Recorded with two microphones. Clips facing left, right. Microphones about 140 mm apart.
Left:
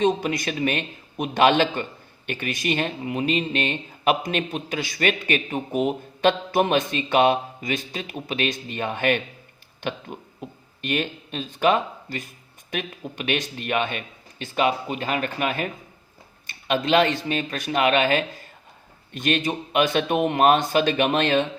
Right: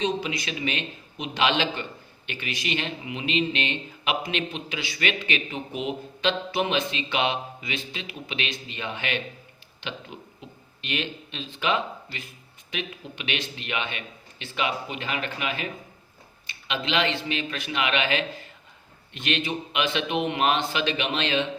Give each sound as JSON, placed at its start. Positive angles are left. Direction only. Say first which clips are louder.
{"t": 0.0, "sound": "a man's voice", "louder": "left 6 dB", "side_deg": 50}